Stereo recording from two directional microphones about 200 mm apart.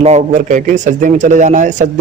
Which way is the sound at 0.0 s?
35° right (ahead or behind).